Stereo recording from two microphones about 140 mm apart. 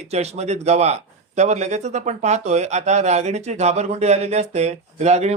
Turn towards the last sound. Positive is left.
turn(degrees=-50)  # may be behind; listen again after turning